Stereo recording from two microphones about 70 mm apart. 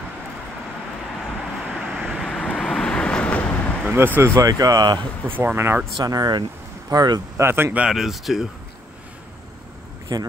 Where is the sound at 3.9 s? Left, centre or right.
Right.